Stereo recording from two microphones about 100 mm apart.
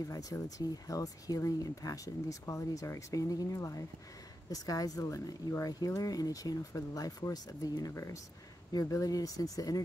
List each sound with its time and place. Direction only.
0.0 s speech: 35° left (ahead or behind)